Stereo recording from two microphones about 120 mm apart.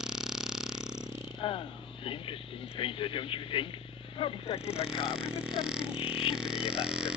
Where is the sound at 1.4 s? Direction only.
45° left (ahead or behind).